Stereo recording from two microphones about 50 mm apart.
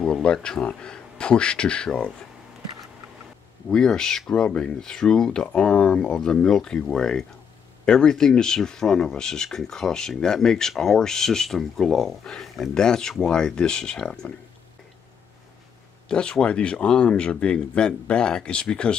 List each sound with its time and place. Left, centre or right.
0.0 s speech: centre
3.7 s speech: centre
16.1 s speech: centre